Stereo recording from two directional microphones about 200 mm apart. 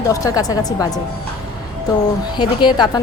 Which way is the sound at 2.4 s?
25° left (ahead or behind).